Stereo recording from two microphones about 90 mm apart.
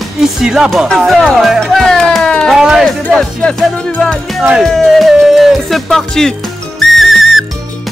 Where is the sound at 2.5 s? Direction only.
5° right (ahead or behind).